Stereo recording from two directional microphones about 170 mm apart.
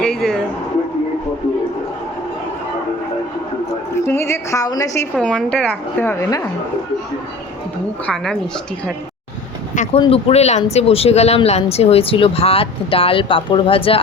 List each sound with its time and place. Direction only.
0.0 s a sound: 5° left (ahead or behind)
4.0 s a woman's voice: 15° left (ahead or behind)
5.1 s a woman's voice: 5° left (ahead or behind)
8.0 s a woman's voice: 5° left (ahead or behind)
9.7 s speech: 45° left (ahead or behind)
10.0 s speech: 35° left (ahead or behind)